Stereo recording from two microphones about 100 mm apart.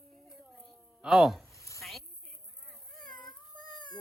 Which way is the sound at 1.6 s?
30° left (ahead or behind).